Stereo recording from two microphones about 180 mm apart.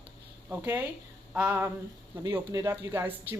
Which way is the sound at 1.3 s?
10° right (ahead or behind).